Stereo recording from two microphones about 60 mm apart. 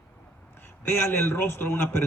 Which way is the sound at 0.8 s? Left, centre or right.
Left.